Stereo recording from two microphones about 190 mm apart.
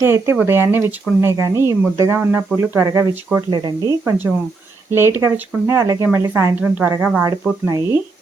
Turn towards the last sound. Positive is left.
turn(degrees=-15)  # may be behind; listen again after turning